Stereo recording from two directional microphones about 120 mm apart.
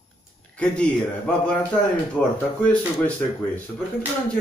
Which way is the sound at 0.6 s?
10° left (ahead or behind).